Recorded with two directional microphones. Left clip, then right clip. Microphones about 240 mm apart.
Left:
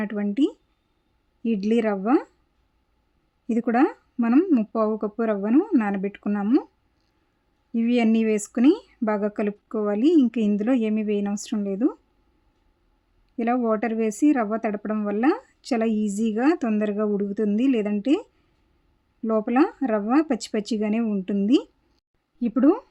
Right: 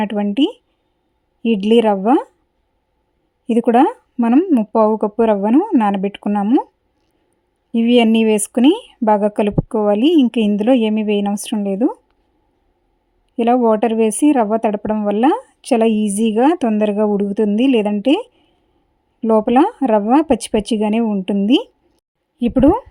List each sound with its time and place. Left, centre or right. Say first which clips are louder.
0.0 s a woman's voice: right 7 dB; right
3.4 s a woman's voice: right 9 dB; right
7.7 s a woman's voice: right 9 dB; right
13.3 s a woman's voice: right 10 dB; right